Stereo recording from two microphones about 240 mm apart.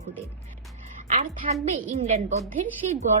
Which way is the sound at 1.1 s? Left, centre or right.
Right.